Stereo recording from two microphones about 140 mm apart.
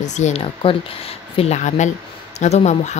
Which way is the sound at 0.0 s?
50° left (ahead or behind).